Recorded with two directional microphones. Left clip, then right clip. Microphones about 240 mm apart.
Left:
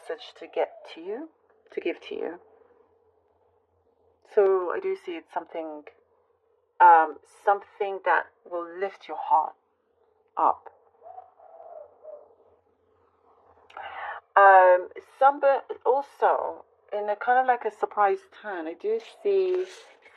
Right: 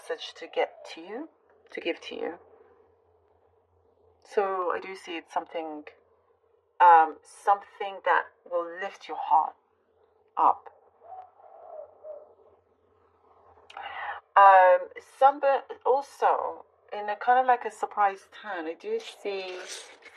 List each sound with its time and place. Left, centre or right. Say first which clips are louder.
0.1 s a woman's voice: even; left
4.2 s a woman's voice: left 5 dB; left
10.3 s crow: right 1 dB; left
13.7 s a woman's voice: even; left